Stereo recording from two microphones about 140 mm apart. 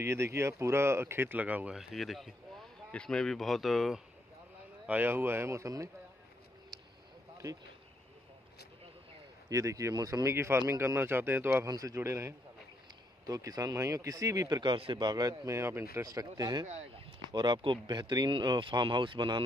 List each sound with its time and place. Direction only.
0.0 s speech: 20° right (ahead or behind); by 4.0 s centre (ahead or behind)
4.8 s speech: 15° right (ahead or behind)
6.7 s a sound: 30° right (ahead or behind)
9.5 s speech: 25° right (ahead or behind)
16.6 s speech: 45° right (ahead or behind); by 19.4 s 30° right (ahead or behind)